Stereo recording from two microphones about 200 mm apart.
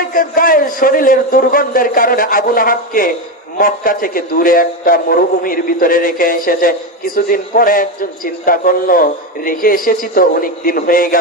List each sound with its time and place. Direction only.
0.1 s a man's voice: 45° left (ahead or behind)